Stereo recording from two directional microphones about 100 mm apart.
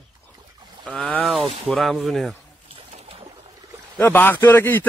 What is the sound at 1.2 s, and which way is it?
A man's voice, centre (ahead or behind).